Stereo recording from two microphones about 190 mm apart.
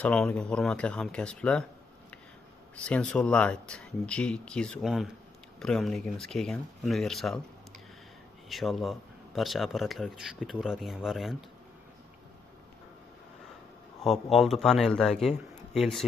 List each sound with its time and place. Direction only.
0.0 s speech: 5° left (ahead or behind)
2.7 s speech: 5° left (ahead or behind)
8.4 s speech: centre (ahead or behind)
14.0 s speech: centre (ahead or behind)